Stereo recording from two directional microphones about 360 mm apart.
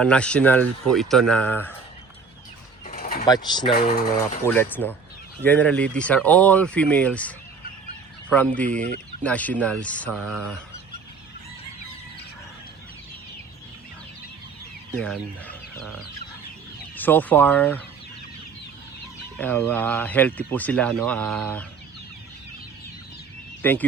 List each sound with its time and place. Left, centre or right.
0.0 s speech: centre
2.8 s pulleys: left
3.2 s speech: centre
3.8 s speech: left
4.4 s speech: centre
14.9 s speech: centre
19.4 s speech: centre
23.6 s speech: centre